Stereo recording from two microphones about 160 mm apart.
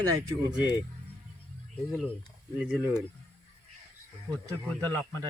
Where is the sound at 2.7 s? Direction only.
5° right (ahead or behind).